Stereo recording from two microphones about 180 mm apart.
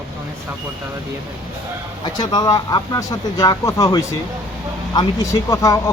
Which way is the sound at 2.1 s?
20° left (ahead or behind).